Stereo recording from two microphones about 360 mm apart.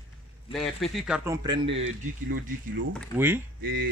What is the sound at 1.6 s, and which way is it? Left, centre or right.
Speech, right.